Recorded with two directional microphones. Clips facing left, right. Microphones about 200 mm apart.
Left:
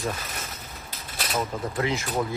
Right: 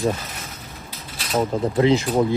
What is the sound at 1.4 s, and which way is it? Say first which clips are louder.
Speech: right 9 dB; 30° right (ahead or behind).